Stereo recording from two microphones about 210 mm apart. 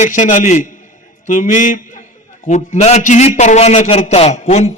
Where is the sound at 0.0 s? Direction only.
35° left (ahead or behind).